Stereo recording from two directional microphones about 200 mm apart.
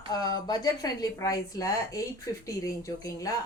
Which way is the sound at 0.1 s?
20° left (ahead or behind).